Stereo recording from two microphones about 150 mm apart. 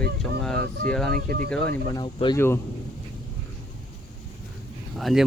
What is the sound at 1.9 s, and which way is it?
Speech, 30° left (ahead or behind).